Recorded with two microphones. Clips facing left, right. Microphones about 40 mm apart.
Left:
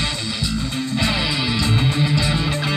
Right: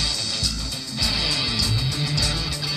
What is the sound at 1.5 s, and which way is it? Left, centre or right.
Music, left.